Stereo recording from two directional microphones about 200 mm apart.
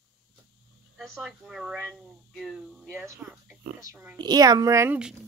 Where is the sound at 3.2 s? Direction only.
Centre (ahead or behind).